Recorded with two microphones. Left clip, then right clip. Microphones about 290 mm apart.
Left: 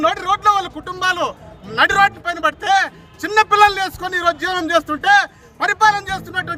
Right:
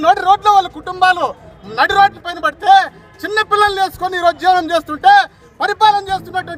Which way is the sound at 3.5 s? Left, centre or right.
Centre.